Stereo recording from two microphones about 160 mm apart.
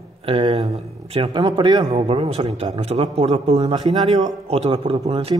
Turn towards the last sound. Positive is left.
turn(degrees=-40)  # may be behind; listen again after turning